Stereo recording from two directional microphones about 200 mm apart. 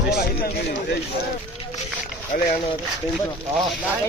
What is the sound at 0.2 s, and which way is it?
Speech, 50° left (ahead or behind).